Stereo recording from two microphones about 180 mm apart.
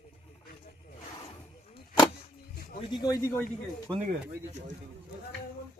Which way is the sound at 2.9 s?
20° left (ahead or behind).